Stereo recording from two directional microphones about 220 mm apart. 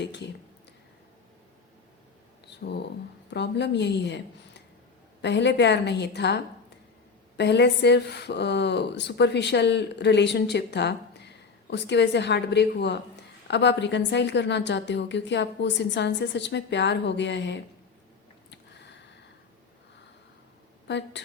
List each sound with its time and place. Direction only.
0.0 s speech: 50° left (ahead or behind)
3.2 s speech: 50° left (ahead or behind)
18.5 s a sound: 50° left (ahead or behind)
20.8 s speech: 50° left (ahead or behind)